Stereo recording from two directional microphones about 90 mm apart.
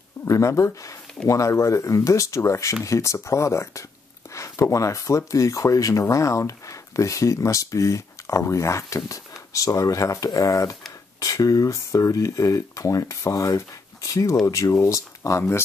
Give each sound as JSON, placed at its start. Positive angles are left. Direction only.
{"t": 0.2, "sound": "speech", "side_deg": 35}